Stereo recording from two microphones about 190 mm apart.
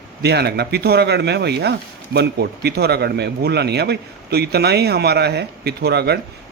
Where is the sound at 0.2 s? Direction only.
60° right (ahead or behind).